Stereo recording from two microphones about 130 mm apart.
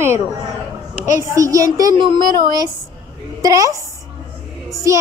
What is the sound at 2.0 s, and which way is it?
A woman's voice, 35° right (ahead or behind).